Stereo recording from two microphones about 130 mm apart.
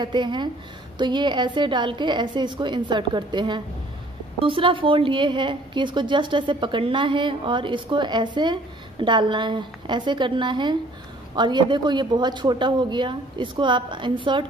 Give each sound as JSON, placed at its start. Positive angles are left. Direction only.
{"t": 0.0, "sound": "a woman's voice", "side_deg": -35}